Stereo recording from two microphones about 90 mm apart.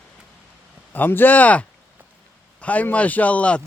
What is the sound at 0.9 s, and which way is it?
Speech, 20° left (ahead or behind).